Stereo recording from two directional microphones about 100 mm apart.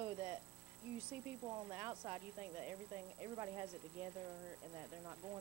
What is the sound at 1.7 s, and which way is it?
Speech, 20° right (ahead or behind).